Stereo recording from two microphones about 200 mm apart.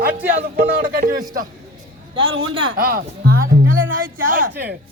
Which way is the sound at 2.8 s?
45° right (ahead or behind).